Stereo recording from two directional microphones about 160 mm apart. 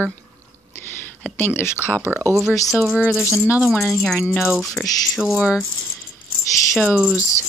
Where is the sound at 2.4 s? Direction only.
Centre (ahead or behind).